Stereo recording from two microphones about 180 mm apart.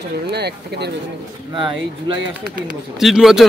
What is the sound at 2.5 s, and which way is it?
Speech, 5° right (ahead or behind).